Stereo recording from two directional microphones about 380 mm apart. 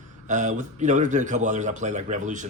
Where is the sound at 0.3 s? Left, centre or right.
Centre.